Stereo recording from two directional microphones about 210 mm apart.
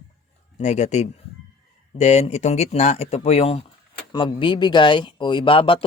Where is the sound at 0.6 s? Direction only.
35° left (ahead or behind).